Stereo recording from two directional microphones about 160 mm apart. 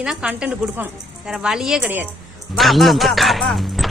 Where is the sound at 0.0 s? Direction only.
5° right (ahead or behind).